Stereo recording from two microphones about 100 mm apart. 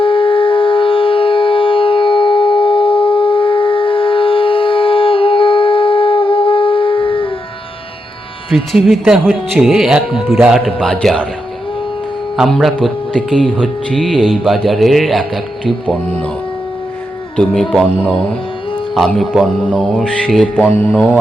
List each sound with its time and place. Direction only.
0.0 s music: 60° left (ahead or behind)
8.4 s speech: centre (ahead or behind)
12.4 s speech: centre (ahead or behind)
17.3 s mantra: 5° left (ahead or behind)
18.9 s speech: centre (ahead or behind)
19.6 s mantra: 10° left (ahead or behind)